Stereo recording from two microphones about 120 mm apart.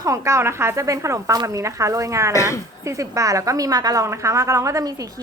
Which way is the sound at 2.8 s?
25° right (ahead or behind).